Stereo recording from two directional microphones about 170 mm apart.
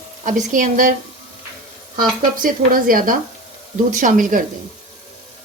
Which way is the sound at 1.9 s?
55° right (ahead or behind).